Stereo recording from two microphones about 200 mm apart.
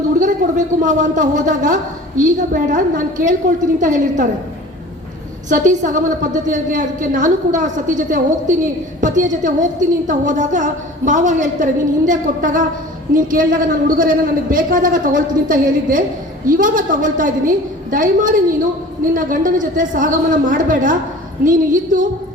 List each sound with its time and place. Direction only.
0.2 s a man's voice: 40° right (ahead or behind)
5.5 s a man's voice: 40° right (ahead or behind)